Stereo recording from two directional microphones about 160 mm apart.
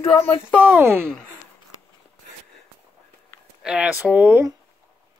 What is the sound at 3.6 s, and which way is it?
Speech, 10° right (ahead or behind).